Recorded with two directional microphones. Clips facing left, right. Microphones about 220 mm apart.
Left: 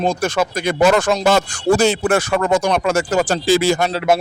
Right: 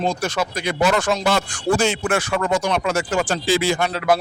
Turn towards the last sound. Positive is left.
turn(degrees=40)  # may be behind; listen again after turning